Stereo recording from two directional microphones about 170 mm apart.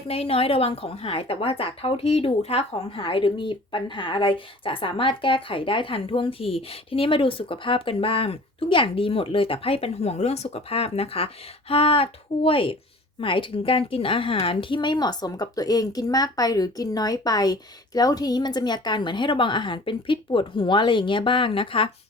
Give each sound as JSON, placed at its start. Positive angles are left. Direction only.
{"t": 0.1, "sound": "a woman's voice", "side_deg": 35}